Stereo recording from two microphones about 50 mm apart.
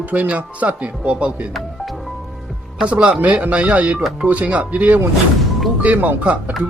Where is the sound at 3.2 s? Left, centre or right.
Right.